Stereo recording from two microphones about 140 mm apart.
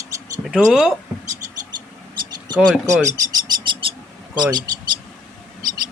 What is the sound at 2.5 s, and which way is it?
Speech, 30° right (ahead or behind).